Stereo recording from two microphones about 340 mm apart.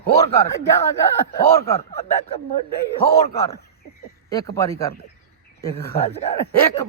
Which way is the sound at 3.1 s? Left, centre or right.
Centre.